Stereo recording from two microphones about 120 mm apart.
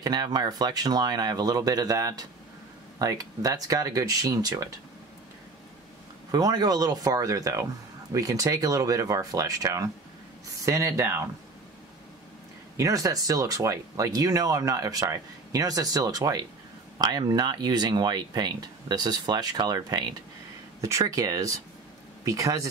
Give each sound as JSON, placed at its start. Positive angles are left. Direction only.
{"t": 0.0, "sound": "speech", "side_deg": -35}
{"t": 6.3, "sound": "speech", "side_deg": -35}
{"t": 12.7, "sound": "speech", "side_deg": -30}